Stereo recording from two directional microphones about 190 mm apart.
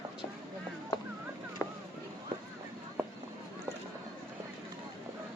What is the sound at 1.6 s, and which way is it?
Boat, 15° left (ahead or behind).